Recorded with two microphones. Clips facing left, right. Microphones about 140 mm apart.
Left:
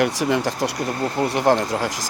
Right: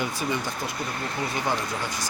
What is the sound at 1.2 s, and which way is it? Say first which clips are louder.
Speech: left 10 dB; 75° left (ahead or behind).